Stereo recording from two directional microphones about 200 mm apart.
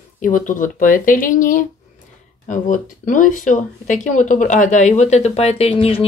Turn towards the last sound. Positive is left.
turn(degrees=30)  # may be behind; listen again after turning